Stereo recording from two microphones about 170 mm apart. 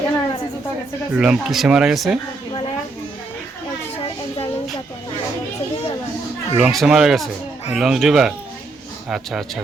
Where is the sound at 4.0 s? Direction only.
35° left (ahead or behind).